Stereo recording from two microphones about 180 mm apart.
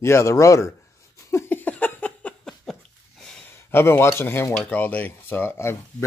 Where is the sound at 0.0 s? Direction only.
15° left (ahead or behind).